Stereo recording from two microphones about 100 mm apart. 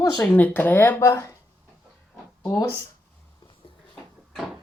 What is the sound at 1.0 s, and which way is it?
Speech, 30° left (ahead or behind).